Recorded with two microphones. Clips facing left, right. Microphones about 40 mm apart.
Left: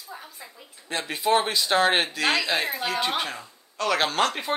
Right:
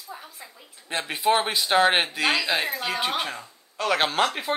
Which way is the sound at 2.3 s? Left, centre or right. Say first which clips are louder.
Even; centre.